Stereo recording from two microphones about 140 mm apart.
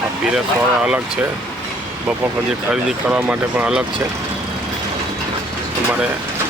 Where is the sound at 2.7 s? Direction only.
10° right (ahead or behind).